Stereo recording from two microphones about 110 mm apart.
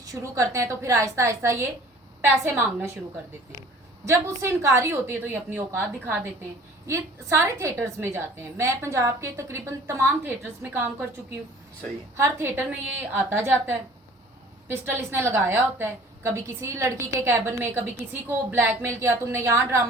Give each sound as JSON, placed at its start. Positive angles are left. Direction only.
{"t": 0.0, "sound": "a woman's voice", "side_deg": -30}
{"t": 4.0, "sound": "a woman's voice", "side_deg": -25}
{"t": 12.1, "sound": "a woman's voice", "side_deg": -25}